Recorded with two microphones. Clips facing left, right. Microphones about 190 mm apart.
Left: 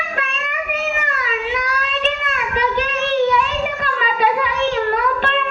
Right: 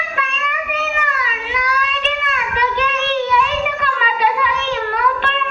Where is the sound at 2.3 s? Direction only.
45° left (ahead or behind).